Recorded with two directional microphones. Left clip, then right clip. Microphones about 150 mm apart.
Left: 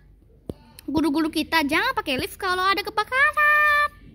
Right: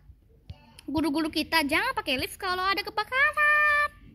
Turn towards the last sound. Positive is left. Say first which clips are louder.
# left 4 dB
turn(degrees=0)  # may be behind; listen again after turning